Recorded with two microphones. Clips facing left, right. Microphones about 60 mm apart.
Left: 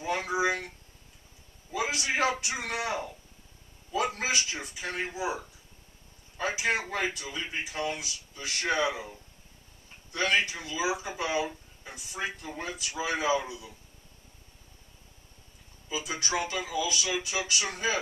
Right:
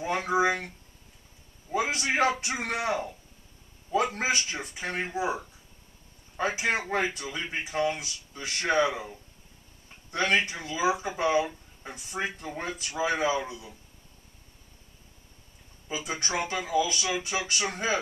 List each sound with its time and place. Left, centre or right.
0.0 s speech: right
1.7 s a man's voice: right
10.1 s speech: right
15.9 s speech: right